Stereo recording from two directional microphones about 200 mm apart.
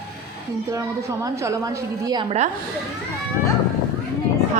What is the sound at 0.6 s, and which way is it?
A woman's voice, 15° right (ahead or behind).